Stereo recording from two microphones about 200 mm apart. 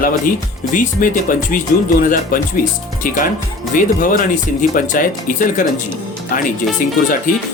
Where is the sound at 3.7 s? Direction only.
40° left (ahead or behind).